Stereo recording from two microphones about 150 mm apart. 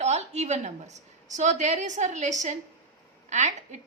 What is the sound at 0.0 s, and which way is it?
A woman's voice, 50° right (ahead or behind).